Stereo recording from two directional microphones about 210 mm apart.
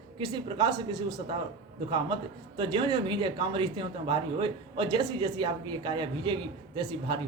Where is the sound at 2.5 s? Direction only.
25° right (ahead or behind).